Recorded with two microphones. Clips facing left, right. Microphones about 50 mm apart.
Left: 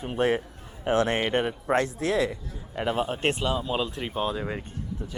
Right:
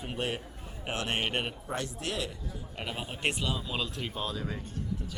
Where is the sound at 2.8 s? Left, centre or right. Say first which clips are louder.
Left 12 dB; centre.